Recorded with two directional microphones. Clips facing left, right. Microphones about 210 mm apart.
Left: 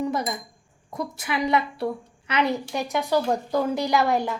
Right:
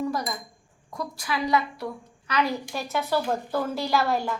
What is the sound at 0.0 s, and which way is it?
A woman's voice, 25° left (ahead or behind).